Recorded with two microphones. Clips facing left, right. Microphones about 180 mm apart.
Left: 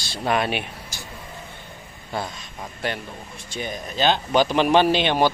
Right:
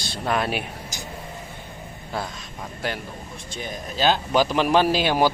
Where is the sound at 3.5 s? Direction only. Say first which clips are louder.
Left 3 dB; centre (ahead or behind).